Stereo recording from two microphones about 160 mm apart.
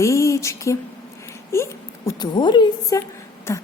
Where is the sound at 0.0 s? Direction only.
20° left (ahead or behind).